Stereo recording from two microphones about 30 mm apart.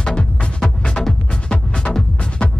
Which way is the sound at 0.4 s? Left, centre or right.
Left.